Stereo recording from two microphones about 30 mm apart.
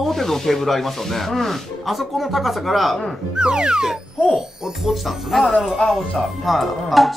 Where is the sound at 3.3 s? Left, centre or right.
Right.